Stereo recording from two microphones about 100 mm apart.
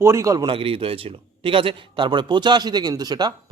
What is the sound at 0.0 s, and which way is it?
Speech, 30° right (ahead or behind).